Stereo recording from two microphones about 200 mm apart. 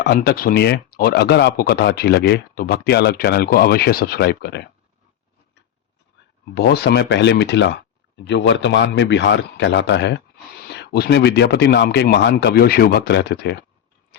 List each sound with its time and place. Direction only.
0.0 s speech: 55° left (ahead or behind)
6.5 s speech: 55° left (ahead or behind)